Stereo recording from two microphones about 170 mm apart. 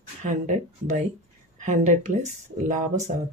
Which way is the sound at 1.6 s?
40° right (ahead or behind).